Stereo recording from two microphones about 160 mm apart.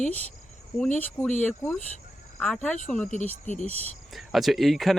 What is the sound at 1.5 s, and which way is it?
Speech, 10° left (ahead or behind).